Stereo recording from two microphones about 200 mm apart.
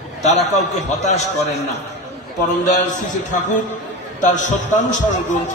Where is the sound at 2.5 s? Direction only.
35° left (ahead or behind).